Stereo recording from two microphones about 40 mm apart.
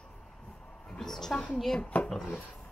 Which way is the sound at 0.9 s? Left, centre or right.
Centre.